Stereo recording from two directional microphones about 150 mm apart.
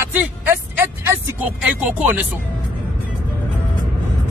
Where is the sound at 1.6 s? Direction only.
10° right (ahead or behind).